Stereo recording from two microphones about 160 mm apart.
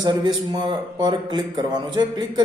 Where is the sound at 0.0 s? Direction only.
30° right (ahead or behind).